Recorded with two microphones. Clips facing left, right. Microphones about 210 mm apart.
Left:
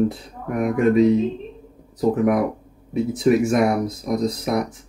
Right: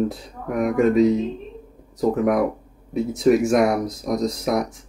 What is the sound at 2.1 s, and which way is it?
Speech, centre (ahead or behind).